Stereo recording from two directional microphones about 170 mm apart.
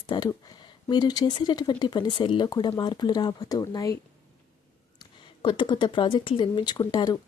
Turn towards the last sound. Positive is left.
turn(degrees=25)  # may be behind; listen again after turning